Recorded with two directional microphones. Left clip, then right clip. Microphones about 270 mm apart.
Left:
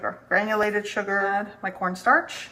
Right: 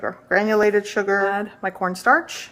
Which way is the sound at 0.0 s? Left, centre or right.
Right.